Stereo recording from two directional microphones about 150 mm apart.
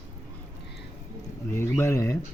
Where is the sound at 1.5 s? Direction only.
20° left (ahead or behind).